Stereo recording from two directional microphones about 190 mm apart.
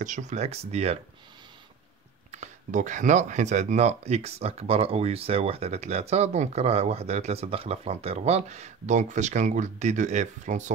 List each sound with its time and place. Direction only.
0.0 s speech: 40° right (ahead or behind)
2.3 s speech: 40° right (ahead or behind)